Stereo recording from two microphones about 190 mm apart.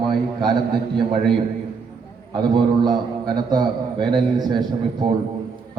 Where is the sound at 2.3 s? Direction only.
25° right (ahead or behind).